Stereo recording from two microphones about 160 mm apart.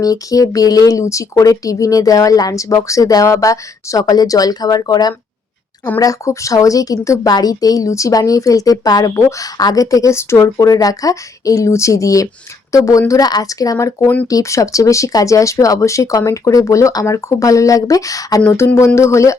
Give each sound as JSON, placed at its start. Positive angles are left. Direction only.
{"t": 0.0, "sound": "a woman's voice", "side_deg": 20}